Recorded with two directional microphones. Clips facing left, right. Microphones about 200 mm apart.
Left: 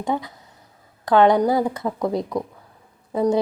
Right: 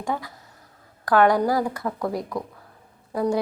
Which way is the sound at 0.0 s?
20° left (ahead or behind).